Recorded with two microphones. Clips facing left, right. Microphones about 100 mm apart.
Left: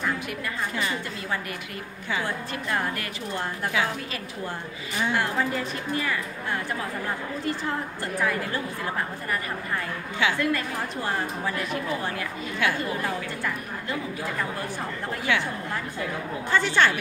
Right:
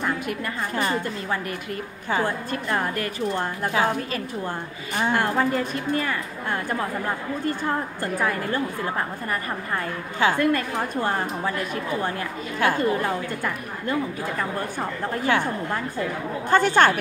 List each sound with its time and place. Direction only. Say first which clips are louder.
0.7 s a woman's voice: right 7 dB; 45° right (ahead or behind)
2.0 s a woman's voice: right 5 dB; 45° right (ahead or behind)
7.4 s a woman's voice: right 4 dB; 45° right (ahead or behind)
10.1 s a woman's voice: right 4 dB; 45° right (ahead or behind)
15.3 s a woman's voice: right 3 dB; 40° right (ahead or behind)
16.4 s a woman's voice: right 5 dB; 45° right (ahead or behind)